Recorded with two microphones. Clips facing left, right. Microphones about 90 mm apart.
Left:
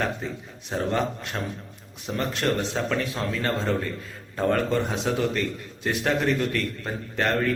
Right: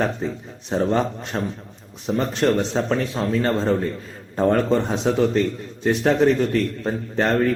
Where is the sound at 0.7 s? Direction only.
25° right (ahead or behind).